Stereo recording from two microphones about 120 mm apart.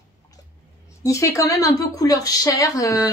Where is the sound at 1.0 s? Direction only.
25° left (ahead or behind).